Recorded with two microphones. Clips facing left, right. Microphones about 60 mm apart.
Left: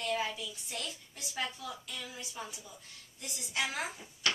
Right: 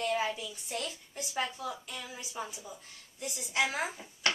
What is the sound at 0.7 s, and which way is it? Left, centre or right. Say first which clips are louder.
Speech: right 4 dB; centre.